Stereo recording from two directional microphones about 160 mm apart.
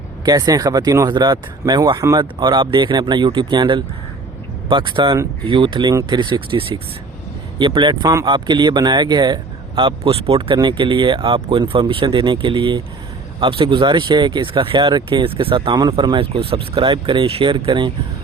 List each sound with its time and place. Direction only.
0.3 s speech: 25° right (ahead or behind)